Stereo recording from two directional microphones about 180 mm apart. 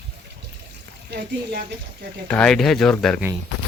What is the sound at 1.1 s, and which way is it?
Speech, 65° right (ahead or behind).